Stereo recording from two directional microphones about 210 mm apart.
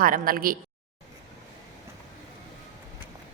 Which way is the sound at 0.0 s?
45° right (ahead or behind).